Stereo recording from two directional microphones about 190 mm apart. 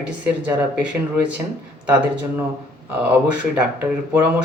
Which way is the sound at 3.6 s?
5° right (ahead or behind).